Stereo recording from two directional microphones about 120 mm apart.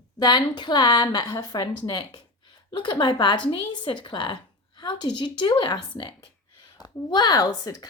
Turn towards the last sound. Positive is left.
turn(degrees=30)  # may be behind; listen again after turning